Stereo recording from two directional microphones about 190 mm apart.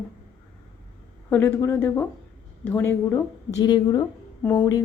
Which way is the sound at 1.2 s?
10° left (ahead or behind).